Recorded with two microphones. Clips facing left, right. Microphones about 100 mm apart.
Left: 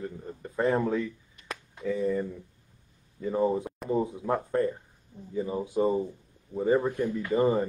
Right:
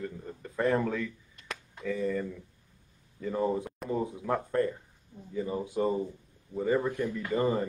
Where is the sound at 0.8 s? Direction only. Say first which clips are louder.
Left 4 dB; 20° left (ahead or behind).